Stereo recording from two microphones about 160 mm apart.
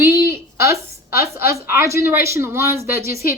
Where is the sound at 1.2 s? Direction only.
20° right (ahead or behind).